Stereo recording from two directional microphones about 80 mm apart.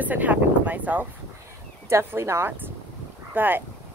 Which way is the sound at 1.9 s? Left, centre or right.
Right.